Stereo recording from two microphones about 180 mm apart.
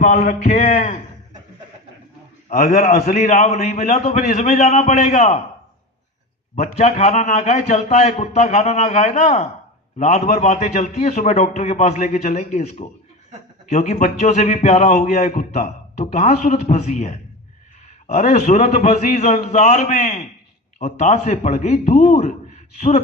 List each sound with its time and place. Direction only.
0.0 s a man's voice: 40° left (ahead or behind)
2.5 s a man's voice: 45° left (ahead or behind)
6.6 s a man's voice: 35° left (ahead or behind)
20.7 s a man's voice: 35° left (ahead or behind)